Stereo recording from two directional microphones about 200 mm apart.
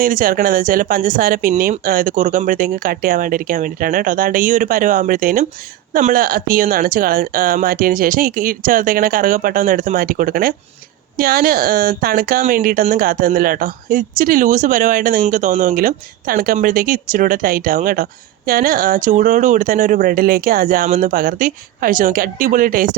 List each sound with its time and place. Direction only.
0.0 s speech: 45° right (ahead or behind)